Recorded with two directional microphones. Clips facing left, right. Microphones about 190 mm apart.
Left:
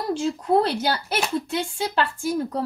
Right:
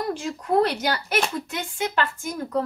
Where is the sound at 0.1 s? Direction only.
30° left (ahead or behind).